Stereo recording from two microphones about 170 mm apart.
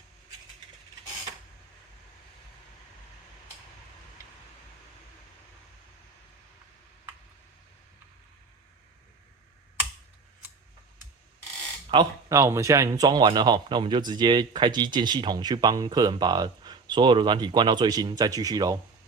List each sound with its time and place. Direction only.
11.9 s speech: 30° right (ahead or behind)
12.3 s speech: 15° right (ahead or behind)